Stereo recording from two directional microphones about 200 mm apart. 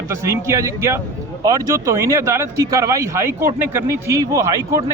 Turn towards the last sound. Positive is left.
turn(degrees=-15)  # may be behind; listen again after turning